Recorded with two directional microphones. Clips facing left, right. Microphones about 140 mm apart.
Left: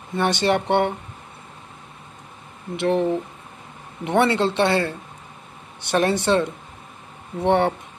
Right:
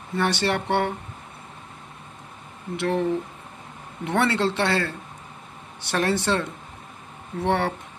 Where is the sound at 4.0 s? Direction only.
20° left (ahead or behind).